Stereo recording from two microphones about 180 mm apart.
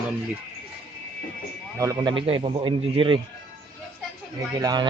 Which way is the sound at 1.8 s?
20° right (ahead or behind).